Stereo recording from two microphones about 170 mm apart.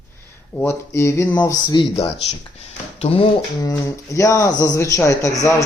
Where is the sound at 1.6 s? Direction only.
30° left (ahead or behind).